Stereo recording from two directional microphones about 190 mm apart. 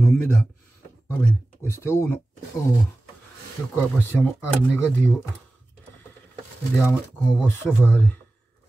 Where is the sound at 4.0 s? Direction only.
10° left (ahead or behind).